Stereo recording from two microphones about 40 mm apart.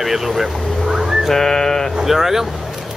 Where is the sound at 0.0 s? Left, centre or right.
Centre.